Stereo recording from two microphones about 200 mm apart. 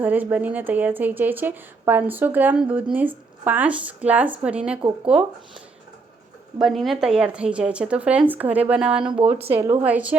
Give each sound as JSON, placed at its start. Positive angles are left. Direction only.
{"t": 0.0, "sound": "speech", "side_deg": -10}
{"t": 6.6, "sound": "speech", "side_deg": 0}
{"t": 9.1, "sound": "speech", "side_deg": -30}
{"t": 9.5, "sound": "speech", "side_deg": -15}